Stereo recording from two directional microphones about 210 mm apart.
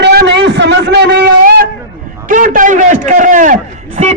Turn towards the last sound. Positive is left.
turn(degrees=-35)  # may be behind; listen again after turning